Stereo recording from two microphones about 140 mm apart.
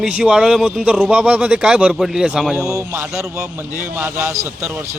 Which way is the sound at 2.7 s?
15° right (ahead or behind).